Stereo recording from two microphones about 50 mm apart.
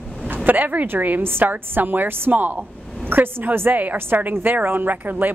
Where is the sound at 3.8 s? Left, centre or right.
Right.